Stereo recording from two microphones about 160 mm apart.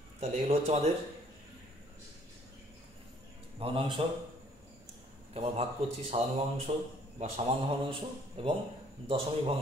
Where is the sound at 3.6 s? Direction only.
35° right (ahead or behind).